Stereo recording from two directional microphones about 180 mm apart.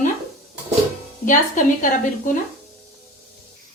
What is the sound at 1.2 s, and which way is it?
A woman's voice, 45° left (ahead or behind).